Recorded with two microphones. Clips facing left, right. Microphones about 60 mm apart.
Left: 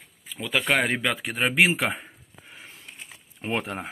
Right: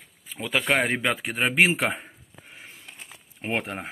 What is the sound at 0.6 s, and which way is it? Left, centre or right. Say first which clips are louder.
Speech: even; centre.